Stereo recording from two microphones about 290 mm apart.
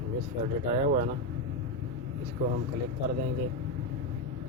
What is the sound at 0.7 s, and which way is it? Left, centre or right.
Speech, right.